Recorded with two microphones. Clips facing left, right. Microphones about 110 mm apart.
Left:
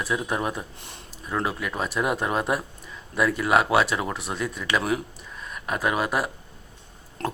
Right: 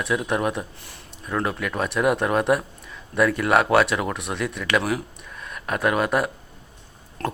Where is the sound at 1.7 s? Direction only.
Centre (ahead or behind).